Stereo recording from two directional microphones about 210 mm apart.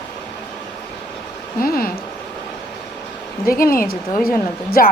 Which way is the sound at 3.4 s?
45° left (ahead or behind).